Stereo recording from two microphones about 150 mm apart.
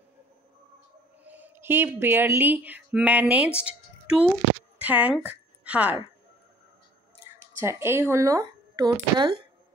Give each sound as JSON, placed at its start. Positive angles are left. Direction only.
{"t": 1.2, "sound": "a woman's voice", "side_deg": -10}
{"t": 7.5, "sound": "speech", "side_deg": -15}